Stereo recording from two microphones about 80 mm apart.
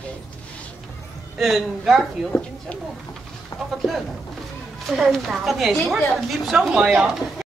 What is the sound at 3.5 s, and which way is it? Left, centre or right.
Bird, left.